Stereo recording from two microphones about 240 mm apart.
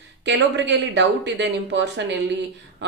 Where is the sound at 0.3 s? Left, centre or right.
Right.